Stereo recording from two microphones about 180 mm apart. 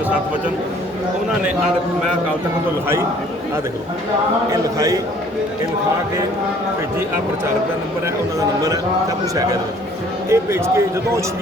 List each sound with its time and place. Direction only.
4.5 s speech: 20° right (ahead or behind)
8.0 s a man's voice: 20° right (ahead or behind)